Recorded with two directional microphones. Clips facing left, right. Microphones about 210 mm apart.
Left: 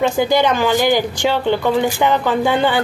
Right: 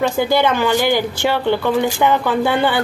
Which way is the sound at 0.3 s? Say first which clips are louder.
Left 1 dB; 15° left (ahead or behind).